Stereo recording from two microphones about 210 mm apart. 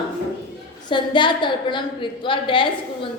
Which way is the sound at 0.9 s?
20° left (ahead or behind).